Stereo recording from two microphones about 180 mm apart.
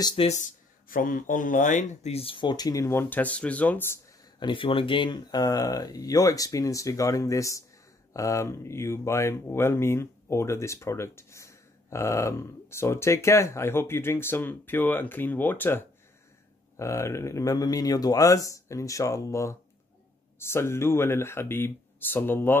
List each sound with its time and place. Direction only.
0.0 s speech: 30° left (ahead or behind); by 4.0 s 10° left (ahead or behind)
4.4 s speech: 25° left (ahead or behind); by 22.6 s 10° left (ahead or behind)